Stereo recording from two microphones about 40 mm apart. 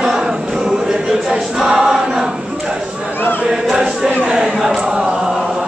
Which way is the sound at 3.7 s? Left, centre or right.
Centre.